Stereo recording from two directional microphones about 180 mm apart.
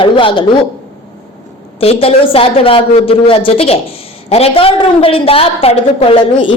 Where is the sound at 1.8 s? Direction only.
30° left (ahead or behind).